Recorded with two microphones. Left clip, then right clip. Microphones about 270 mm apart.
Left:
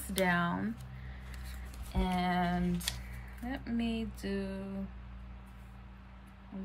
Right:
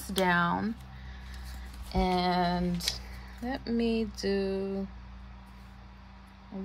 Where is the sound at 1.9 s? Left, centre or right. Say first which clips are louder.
Right 6 dB; right.